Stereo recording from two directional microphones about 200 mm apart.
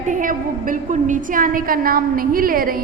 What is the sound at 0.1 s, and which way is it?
A woman's voice, 40° right (ahead or behind).